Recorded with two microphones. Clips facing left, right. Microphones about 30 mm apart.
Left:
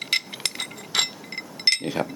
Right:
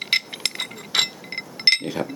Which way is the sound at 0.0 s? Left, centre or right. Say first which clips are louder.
Right 3 dB; centre.